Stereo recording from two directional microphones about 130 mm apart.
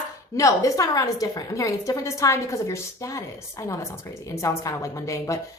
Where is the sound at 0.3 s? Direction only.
25° left (ahead or behind).